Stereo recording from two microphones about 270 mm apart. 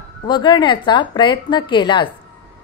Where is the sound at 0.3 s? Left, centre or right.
Centre.